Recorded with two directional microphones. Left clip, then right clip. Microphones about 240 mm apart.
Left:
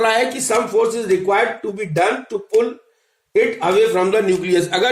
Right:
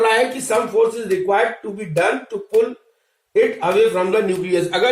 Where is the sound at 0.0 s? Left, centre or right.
Left.